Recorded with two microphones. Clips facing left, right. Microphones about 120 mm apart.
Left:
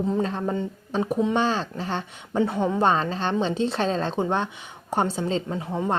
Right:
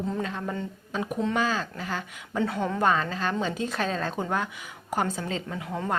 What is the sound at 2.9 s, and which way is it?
A woman's voice, 30° left (ahead or behind).